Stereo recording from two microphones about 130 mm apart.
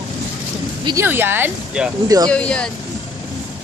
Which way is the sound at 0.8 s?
20° right (ahead or behind).